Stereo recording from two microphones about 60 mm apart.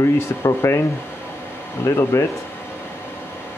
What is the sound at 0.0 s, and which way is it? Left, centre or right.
Speech, left.